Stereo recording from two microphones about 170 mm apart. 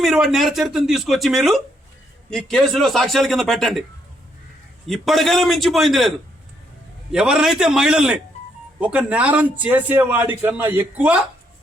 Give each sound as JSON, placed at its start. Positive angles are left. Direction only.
{"t": 0.0, "sound": "speech", "side_deg": 0}
{"t": 4.9, "sound": "a man's voice", "side_deg": 0}